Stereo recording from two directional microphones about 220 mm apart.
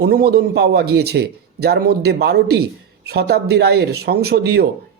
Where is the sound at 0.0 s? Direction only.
45° right (ahead or behind).